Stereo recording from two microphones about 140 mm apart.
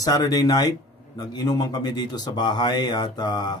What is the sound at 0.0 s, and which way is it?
A man's voice, 25° left (ahead or behind).